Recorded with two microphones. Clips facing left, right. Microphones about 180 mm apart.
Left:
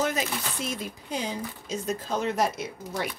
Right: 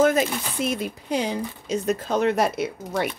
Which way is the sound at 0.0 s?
55° right (ahead or behind).